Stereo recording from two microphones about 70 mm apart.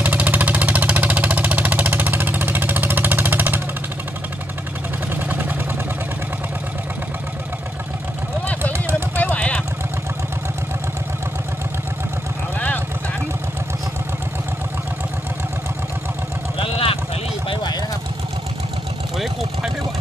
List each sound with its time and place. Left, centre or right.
0.0 s vehicle: right
5.1 s vehicle: right
9.1 s a sound: left
12.5 s vehicle: left
19.1 s vehicle: centre